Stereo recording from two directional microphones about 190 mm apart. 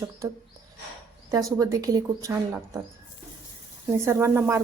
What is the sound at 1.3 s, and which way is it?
A woman's voice, 15° right (ahead or behind).